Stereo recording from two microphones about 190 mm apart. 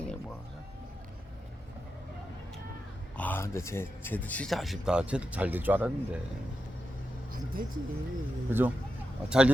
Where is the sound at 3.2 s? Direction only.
10° left (ahead or behind); by 6.2 s 10° right (ahead or behind).